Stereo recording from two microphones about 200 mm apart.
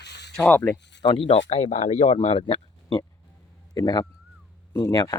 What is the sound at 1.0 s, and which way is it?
Speech, 25° left (ahead or behind).